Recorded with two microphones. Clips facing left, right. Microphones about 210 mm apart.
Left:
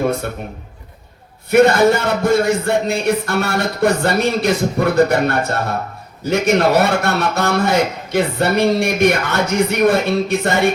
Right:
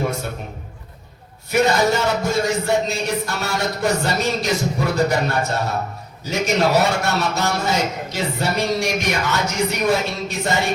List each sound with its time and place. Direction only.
1.5 s a man's voice: 55° left (ahead or behind)